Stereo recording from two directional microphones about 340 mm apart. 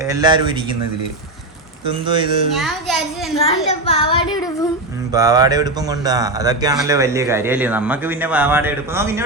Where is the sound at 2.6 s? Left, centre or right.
Centre.